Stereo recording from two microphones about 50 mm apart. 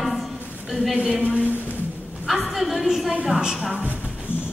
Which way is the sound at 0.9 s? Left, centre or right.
Centre.